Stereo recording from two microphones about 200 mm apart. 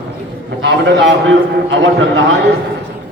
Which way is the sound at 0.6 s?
60° right (ahead or behind).